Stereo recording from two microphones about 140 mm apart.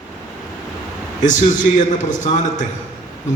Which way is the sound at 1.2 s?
60° left (ahead or behind).